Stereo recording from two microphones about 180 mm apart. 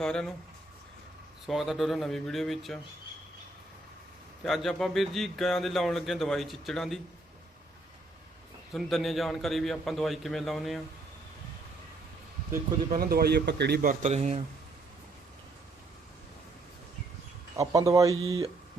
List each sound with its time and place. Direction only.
0.0 s speech: 5° left (ahead or behind)
1.5 s speech: centre (ahead or behind)
4.4 s speech: centre (ahead or behind)
8.7 s speech: centre (ahead or behind)
13.0 s speech: 55° right (ahead or behind); by 14.4 s 40° right (ahead or behind)
17.6 s speech: 20° right (ahead or behind)